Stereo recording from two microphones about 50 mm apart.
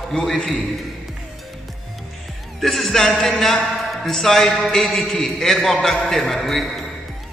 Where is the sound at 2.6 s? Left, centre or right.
Centre.